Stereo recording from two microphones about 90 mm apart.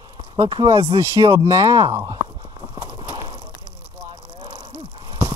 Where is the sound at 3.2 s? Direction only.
55° right (ahead or behind).